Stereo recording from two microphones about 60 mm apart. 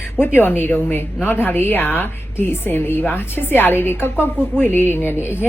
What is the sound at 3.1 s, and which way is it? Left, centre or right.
A woman's voice, left.